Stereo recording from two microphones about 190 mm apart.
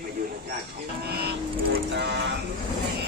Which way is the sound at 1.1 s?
55° right (ahead or behind).